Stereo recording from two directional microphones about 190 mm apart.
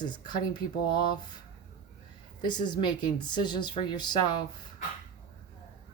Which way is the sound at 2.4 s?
25° left (ahead or behind).